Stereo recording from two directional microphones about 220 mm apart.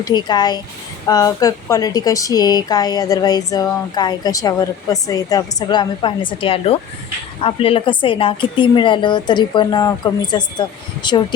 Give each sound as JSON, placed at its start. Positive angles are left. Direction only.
{"t": 0.0, "sound": "a woman's voice", "side_deg": 20}